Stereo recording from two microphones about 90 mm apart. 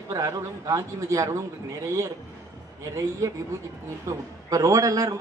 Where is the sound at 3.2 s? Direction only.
40° right (ahead or behind).